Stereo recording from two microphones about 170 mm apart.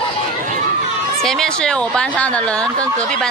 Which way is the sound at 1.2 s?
5° left (ahead or behind).